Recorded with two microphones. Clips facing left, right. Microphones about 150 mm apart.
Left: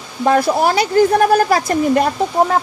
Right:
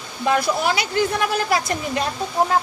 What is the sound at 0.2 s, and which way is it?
Speech, 50° left (ahead or behind).